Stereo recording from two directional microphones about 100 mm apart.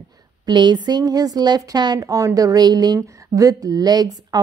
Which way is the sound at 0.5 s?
45° right (ahead or behind).